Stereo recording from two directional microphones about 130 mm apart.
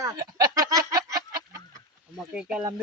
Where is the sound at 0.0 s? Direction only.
25° right (ahead or behind).